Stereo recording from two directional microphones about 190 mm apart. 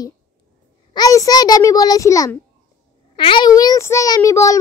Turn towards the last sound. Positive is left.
turn(degrees=15)  # may be behind; listen again after turning